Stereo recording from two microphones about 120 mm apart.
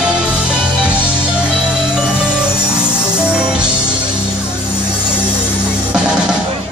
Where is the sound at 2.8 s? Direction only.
10° right (ahead or behind).